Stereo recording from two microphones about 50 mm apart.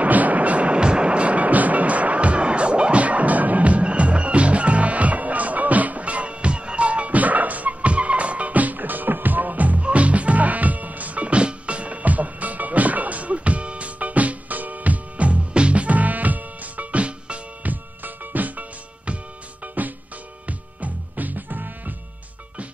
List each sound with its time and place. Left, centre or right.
0.0 s music: right
18.0 s music: right